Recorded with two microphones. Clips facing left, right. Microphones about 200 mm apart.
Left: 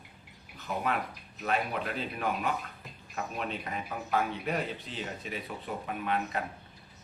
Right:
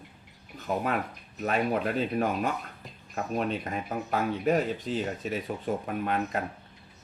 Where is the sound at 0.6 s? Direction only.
45° right (ahead or behind).